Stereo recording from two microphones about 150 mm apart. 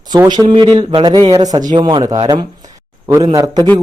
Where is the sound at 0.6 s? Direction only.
35° right (ahead or behind).